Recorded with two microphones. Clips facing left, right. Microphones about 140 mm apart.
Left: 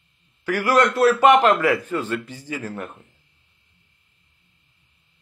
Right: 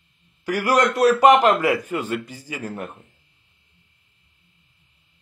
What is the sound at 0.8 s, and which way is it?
A man's voice, 15° right (ahead or behind).